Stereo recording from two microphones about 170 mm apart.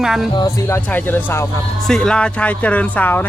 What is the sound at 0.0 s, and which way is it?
Speech, centre (ahead or behind).